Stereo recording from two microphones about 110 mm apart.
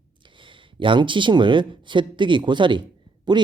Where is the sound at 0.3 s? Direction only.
50° right (ahead or behind).